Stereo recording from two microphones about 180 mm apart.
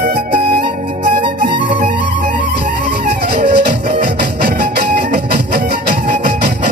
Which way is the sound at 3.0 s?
65° right (ahead or behind).